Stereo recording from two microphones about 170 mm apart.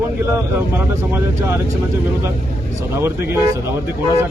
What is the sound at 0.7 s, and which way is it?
Speech, 15° right (ahead or behind).